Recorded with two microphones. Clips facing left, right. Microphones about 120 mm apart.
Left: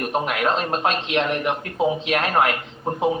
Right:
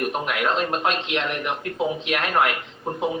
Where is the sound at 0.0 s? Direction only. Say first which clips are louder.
Left 2 dB; 35° left (ahead or behind).